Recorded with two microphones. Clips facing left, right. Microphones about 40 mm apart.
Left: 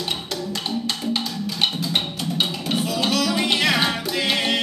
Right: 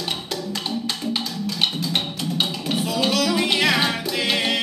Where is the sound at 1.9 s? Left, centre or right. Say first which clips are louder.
Even; centre.